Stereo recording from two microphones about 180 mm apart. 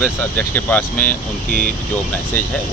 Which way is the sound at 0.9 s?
50° left (ahead or behind).